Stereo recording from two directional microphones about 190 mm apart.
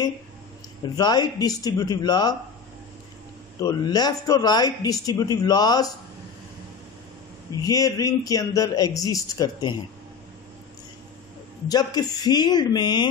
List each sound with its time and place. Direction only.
0.9 s a man's voice: 20° left (ahead or behind)
3.6 s a man's voice: 20° left (ahead or behind)
7.5 s a man's voice: 20° left (ahead or behind)
11.7 s a man's voice: 20° left (ahead or behind)